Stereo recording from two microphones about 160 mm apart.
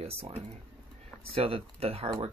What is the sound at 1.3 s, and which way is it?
Speech, 35° right (ahead or behind).